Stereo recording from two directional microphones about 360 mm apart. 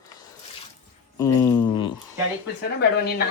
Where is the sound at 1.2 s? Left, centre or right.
Centre.